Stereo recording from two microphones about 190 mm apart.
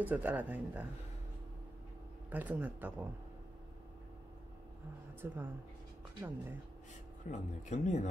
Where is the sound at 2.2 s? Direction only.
10° right (ahead or behind).